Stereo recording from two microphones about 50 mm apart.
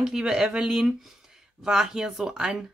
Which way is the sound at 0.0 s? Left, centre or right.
Centre.